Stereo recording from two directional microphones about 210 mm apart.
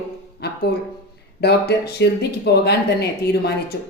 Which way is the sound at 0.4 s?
50° left (ahead or behind).